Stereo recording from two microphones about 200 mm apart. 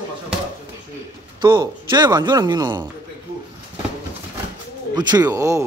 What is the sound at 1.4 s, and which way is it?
Speech, 20° right (ahead or behind).